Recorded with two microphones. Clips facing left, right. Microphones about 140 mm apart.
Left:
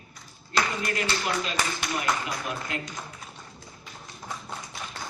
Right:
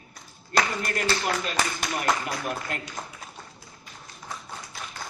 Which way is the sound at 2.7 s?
50° right (ahead or behind).